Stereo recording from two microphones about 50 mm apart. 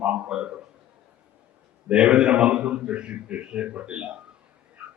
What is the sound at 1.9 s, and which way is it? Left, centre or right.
A man's voice, centre.